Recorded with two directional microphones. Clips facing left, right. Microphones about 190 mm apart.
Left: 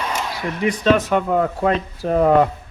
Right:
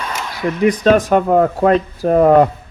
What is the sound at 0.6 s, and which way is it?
Speech, 45° right (ahead or behind).